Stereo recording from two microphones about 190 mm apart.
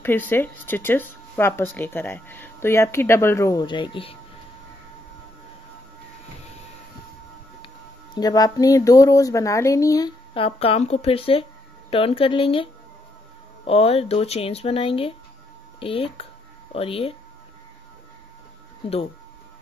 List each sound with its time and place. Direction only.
0.0 s speech: 10° left (ahead or behind); by 4.2 s 25° left (ahead or behind)
7.6 s speech: 20° left (ahead or behind)
13.7 s speech: 30° left (ahead or behind)